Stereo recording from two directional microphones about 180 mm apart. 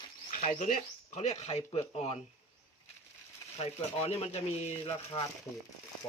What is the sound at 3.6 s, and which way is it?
Speech, 35° left (ahead or behind).